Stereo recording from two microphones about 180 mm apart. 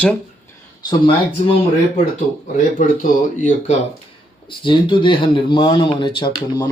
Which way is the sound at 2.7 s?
50° left (ahead or behind).